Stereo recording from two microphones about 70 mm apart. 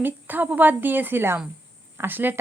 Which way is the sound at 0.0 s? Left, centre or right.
Right.